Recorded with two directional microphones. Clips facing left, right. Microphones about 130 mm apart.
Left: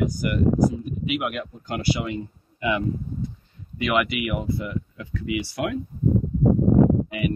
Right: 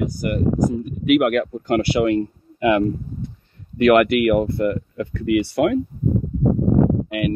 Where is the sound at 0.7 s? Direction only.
55° right (ahead or behind).